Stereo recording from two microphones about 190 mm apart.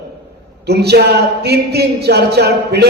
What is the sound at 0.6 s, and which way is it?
Speech, 60° right (ahead or behind).